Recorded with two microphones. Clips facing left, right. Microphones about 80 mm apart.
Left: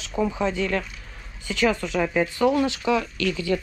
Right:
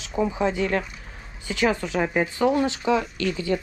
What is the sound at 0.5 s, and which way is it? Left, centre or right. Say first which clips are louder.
Speech: right 1 dB; right.